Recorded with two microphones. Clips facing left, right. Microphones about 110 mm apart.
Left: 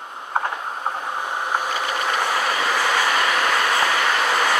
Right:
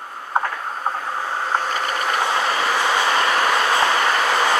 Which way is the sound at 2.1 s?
20° right (ahead or behind).